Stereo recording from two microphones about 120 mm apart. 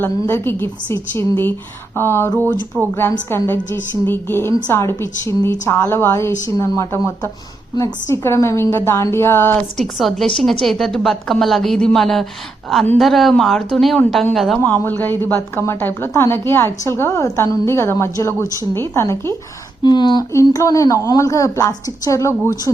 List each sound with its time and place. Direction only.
0.0 s a woman's voice: 20° left (ahead or behind); by 7.9 s 35° left (ahead or behind)
8.1 s a woman's voice: 20° left (ahead or behind)
9.7 s a woman's voice: centre (ahead or behind)
14.6 s a woman's voice: 15° left (ahead or behind)
19.8 s speech: 40° left (ahead or behind)
20.3 s a woman's voice: 25° left (ahead or behind)